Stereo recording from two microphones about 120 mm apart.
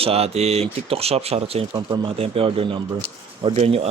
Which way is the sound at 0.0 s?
55° right (ahead or behind).